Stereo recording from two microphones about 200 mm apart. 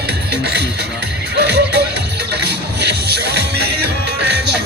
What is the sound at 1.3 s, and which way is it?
Music, 55° right (ahead or behind).